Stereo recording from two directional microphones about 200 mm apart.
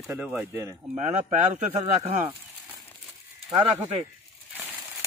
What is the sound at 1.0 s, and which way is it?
Speech, 35° right (ahead or behind).